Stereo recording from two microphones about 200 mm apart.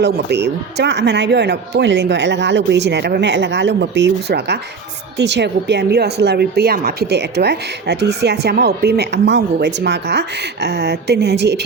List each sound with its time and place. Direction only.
0.0 s speech: 55° right (ahead or behind)